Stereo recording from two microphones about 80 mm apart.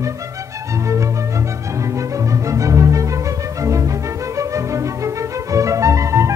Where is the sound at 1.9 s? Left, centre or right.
Right.